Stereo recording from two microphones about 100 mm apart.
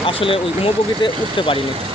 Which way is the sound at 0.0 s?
65° left (ahead or behind).